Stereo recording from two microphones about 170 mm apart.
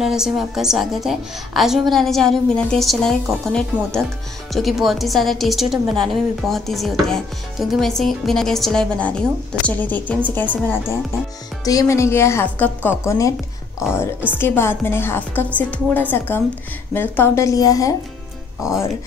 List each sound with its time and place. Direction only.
0.0 s a woman's voice: 5° right (ahead or behind)
11.6 s a woman's voice: 20° left (ahead or behind)
14.4 s a woman's voice: 15° left (ahead or behind)